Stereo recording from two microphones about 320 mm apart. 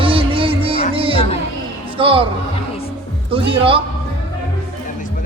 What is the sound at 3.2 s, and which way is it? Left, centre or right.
Music, centre.